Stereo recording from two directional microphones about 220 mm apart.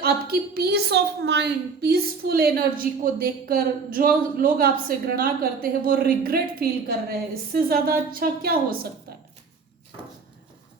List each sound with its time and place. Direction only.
0.0 s a woman's voice: 45° right (ahead or behind)